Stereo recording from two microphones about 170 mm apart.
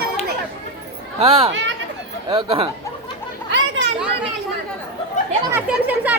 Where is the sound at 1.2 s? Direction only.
35° right (ahead or behind).